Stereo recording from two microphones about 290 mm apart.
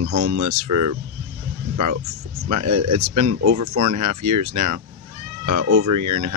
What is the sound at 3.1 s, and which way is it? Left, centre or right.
Speech, right.